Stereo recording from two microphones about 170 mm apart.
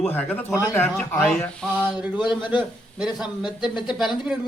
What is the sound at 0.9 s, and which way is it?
Speech, 5° left (ahead or behind).